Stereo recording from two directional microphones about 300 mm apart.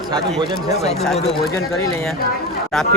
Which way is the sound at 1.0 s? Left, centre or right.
Centre.